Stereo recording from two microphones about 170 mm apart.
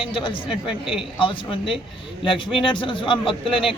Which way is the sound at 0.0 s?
30° left (ahead or behind).